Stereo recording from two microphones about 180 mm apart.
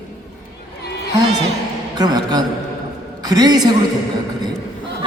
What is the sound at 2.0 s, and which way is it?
A woman's voice, 25° right (ahead or behind).